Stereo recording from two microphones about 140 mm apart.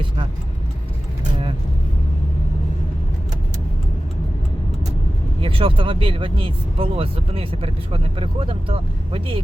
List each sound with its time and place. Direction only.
5.4 s speech: 40° right (ahead or behind)